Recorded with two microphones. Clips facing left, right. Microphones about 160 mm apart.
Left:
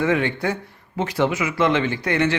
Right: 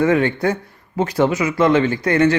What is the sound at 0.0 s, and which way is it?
Speech, 45° right (ahead or behind).